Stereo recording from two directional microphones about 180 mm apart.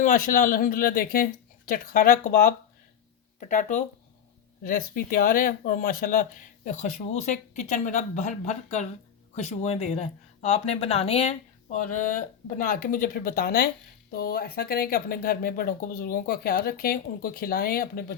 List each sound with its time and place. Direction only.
0.0 s speech: 50° left (ahead or behind)
6.7 s speech: 40° left (ahead or behind); by 18.0 s 55° left (ahead or behind)